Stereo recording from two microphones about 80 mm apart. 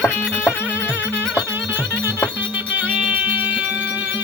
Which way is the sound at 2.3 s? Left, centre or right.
Right.